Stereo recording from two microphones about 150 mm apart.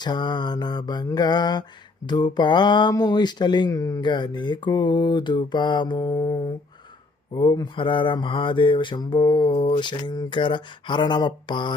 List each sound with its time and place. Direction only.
0.0 s mantra: 30° left (ahead or behind)
7.3 s speech: 30° left (ahead or behind)